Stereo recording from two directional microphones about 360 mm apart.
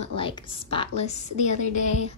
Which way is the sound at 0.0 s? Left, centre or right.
Centre.